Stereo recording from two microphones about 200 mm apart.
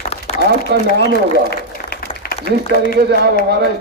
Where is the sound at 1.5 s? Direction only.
50° left (ahead or behind).